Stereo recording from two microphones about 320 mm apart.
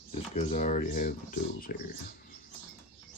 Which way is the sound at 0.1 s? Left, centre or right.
Left.